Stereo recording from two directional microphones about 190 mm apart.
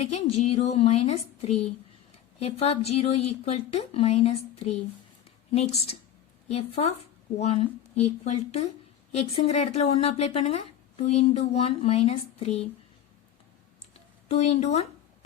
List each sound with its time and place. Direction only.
0.0 s speech: 35° left (ahead or behind)
14.3 s speech: 35° left (ahead or behind)